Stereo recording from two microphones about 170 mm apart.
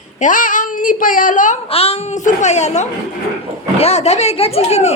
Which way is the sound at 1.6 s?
35° left (ahead or behind).